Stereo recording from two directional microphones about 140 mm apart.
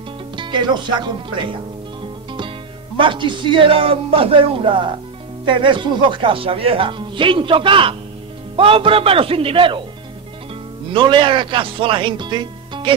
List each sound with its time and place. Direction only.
0.4 s speech: 35° right (ahead or behind)
3.0 s speech: 35° right (ahead or behind)
10.9 s speech: 35° right (ahead or behind)